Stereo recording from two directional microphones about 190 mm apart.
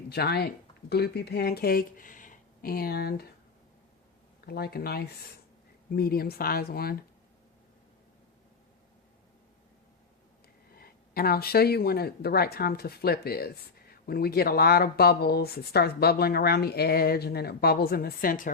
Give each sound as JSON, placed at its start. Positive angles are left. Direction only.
{"t": 0.1, "sound": "speech", "side_deg": 55}
{"t": 4.4, "sound": "speech", "side_deg": 55}
{"t": 10.8, "sound": "speech", "side_deg": 50}